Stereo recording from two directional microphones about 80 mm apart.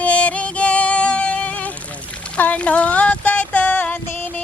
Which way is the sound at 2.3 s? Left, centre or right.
Centre.